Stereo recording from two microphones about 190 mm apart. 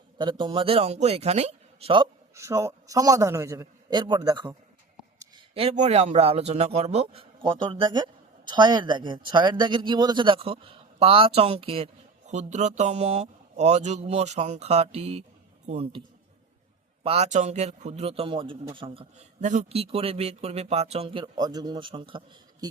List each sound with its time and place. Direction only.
0.2 s a man's voice: 25° right (ahead or behind)
2.3 s a man's voice: 15° right (ahead or behind)
5.5 s a man's voice: 35° right (ahead or behind)